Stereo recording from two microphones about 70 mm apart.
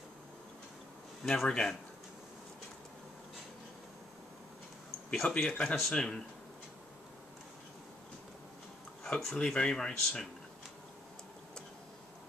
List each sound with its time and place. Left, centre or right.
1.2 s speech: centre
5.1 s speech: centre
9.0 s speech: centre